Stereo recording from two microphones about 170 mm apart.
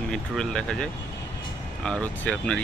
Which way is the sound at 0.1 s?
5° left (ahead or behind).